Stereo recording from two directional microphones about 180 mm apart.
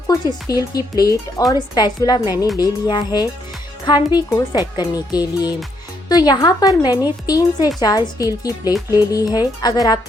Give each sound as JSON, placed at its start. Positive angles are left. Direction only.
{"t": 0.1, "sound": "speech", "side_deg": 20}